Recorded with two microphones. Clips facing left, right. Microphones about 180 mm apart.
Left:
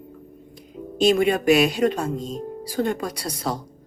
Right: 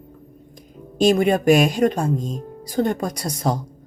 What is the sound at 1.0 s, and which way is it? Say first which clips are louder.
Speech: right 2 dB; 45° right (ahead or behind).